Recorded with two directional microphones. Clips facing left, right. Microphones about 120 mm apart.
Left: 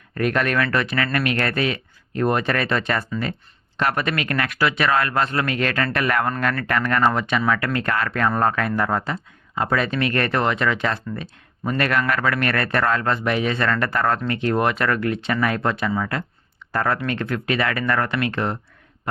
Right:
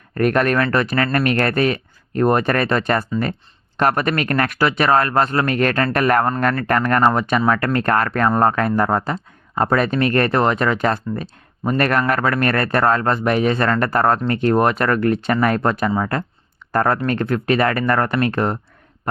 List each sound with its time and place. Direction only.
0.1 s speech: 45° right (ahead or behind)